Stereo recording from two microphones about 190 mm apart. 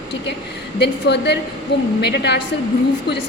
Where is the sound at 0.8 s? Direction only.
65° left (ahead or behind).